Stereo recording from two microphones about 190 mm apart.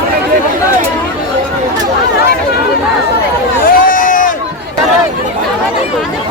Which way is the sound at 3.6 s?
45° left (ahead or behind).